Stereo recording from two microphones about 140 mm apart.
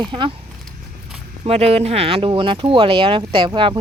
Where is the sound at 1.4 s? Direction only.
45° right (ahead or behind).